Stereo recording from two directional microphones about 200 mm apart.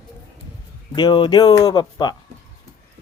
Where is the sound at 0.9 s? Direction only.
25° left (ahead or behind).